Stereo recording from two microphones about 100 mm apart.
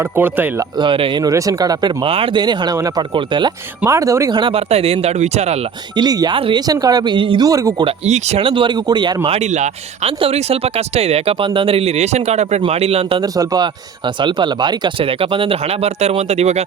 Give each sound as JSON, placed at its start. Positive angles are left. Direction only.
{"t": 0.8, "sound": "speech", "side_deg": -55}
{"t": 1.2, "sound": "speech", "side_deg": -35}
{"t": 2.0, "sound": "speech", "side_deg": -60}
{"t": 3.8, "sound": "speech", "side_deg": -30}
{"t": 4.3, "sound": "speech", "side_deg": -55}
{"t": 4.7, "sound": "speech", "side_deg": -85}
{"t": 6.0, "sound": "speech", "side_deg": -45}
{"t": 6.3, "sound": "speech", "side_deg": -60}
{"t": 6.7, "sound": "speech", "side_deg": -40}
{"t": 7.4, "sound": "speech", "side_deg": -35}
{"t": 7.9, "sound": "speech", "side_deg": -80}
{"t": 9.2, "sound": "speech", "side_deg": -90}
{"t": 13.2, "sound": "speech", "side_deg": -35}
{"t": 14.2, "sound": "speech", "side_deg": -50}